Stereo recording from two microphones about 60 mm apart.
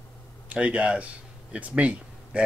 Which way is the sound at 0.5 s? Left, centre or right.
Right.